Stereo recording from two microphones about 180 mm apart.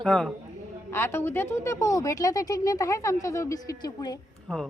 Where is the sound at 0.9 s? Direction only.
15° left (ahead or behind).